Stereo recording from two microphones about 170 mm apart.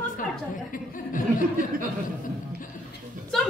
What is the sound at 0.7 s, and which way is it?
Speech, 50° left (ahead or behind).